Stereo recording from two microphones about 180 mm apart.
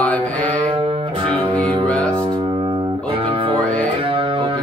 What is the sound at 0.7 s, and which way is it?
Music, 30° right (ahead or behind).